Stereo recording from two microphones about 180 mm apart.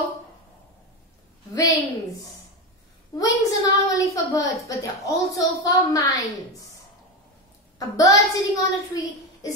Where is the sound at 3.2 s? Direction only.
20° left (ahead or behind).